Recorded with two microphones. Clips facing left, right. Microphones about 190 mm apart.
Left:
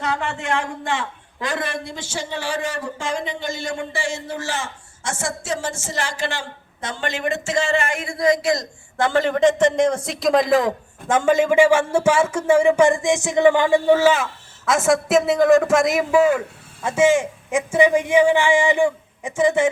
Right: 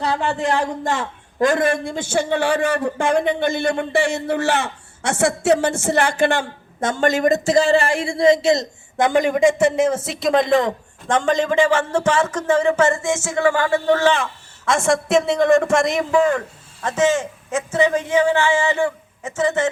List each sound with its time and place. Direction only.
0.0 s a man's voice: 35° right (ahead or behind); by 19.6 s 10° left (ahead or behind)